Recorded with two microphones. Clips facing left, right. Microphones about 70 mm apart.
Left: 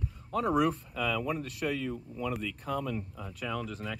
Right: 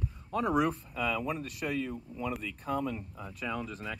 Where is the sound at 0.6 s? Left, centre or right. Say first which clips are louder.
Left 1 dB; right.